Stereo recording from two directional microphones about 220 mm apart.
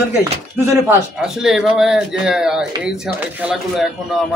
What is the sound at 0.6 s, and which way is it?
A man's voice, 5° right (ahead or behind).